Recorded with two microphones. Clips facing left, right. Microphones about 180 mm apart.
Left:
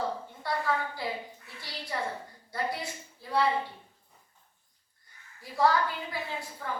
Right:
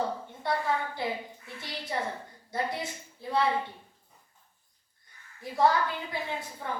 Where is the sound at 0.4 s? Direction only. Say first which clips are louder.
Right 3 dB; 20° right (ahead or behind).